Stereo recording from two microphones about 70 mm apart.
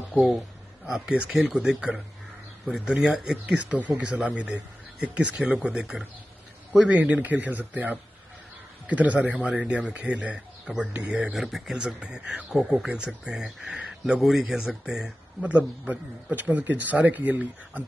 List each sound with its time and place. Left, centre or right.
0.1 s a man's voice: centre
11.3 s a man's voice: centre
15.4 s a man's voice: right